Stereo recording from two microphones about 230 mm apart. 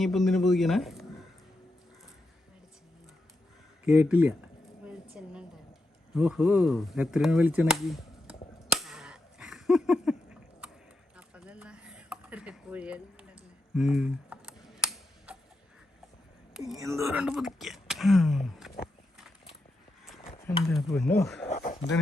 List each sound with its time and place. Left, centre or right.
0.0 s speech: centre
3.8 s speech: centre
4.9 s a sound: centre
6.1 s speech: centre
8.7 s cap gun: centre
11.2 s a sound: centre
16.6 s speech: centre
16.8 s speech: centre
20.8 s speech: centre
21.4 s speech: left